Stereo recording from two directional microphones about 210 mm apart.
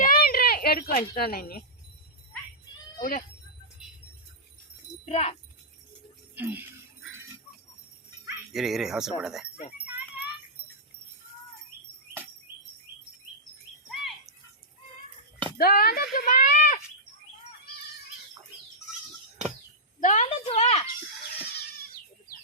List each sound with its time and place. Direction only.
0.0 s a sound: 45° left (ahead or behind)
3.0 s speech: 40° left (ahead or behind)
5.0 s speech: 30° left (ahead or behind)
6.3 s speech: 10° right (ahead or behind)
8.5 s speech: centre (ahead or behind)
13.9 s chirp: centre (ahead or behind)
15.5 s speech: 45° left (ahead or behind)
16.1 s a sound: 40° left (ahead or behind)
20.0 s speech: 35° left (ahead or behind)